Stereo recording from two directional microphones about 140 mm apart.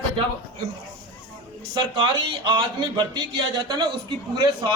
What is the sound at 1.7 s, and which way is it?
A man's voice, 35° right (ahead or behind).